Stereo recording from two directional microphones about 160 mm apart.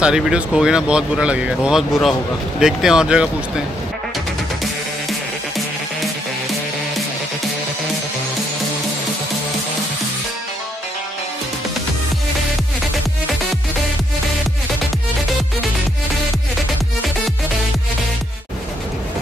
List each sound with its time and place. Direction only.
0.0 s speech: 5° right (ahead or behind)